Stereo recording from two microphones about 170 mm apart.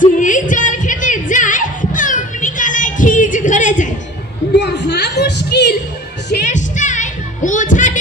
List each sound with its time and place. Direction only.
0.0 s music: 50° left (ahead or behind)
4.6 s a sound: 90° left
6.4 s music: 45° left (ahead or behind)